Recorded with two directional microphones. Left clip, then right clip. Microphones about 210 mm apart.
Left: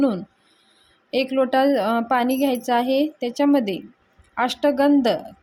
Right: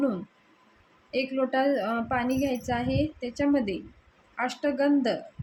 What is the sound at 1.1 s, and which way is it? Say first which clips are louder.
Speech: left 7 dB; 40° left (ahead or behind).